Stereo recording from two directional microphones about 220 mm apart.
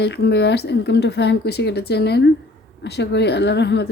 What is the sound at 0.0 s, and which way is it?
A woman's voice, 50° left (ahead or behind).